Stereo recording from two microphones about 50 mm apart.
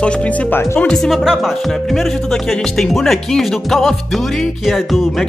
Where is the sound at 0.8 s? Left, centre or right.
Centre.